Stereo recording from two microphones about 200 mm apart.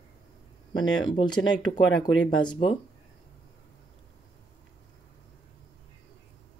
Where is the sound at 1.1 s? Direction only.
20° left (ahead or behind).